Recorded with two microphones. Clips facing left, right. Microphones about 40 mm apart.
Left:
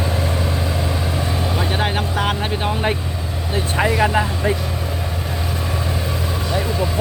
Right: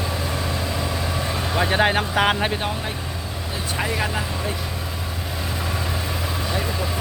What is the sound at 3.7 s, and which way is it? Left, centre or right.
Speech, centre.